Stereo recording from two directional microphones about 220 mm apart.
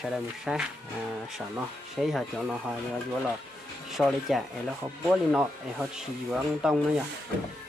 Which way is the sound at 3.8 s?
Centre (ahead or behind).